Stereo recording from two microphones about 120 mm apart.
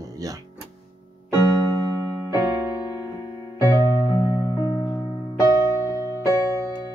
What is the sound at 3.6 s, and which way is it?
Music, 30° left (ahead or behind).